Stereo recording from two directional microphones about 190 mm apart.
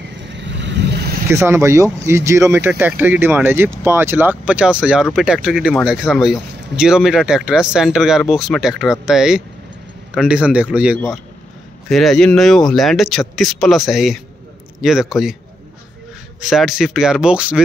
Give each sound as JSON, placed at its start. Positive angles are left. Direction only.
{"t": 0.3, "sound": "vehicle", "side_deg": -70}
{"t": 1.3, "sound": "speech", "side_deg": -15}
{"t": 16.3, "sound": "speech", "side_deg": 0}